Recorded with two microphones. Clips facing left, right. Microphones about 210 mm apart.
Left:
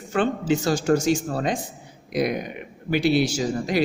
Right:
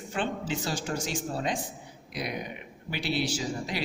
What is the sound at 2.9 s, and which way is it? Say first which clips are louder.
Speech: left 10 dB; 45° left (ahead or behind).